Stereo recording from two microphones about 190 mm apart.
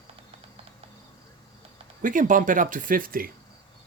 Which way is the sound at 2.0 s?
45° right (ahead or behind).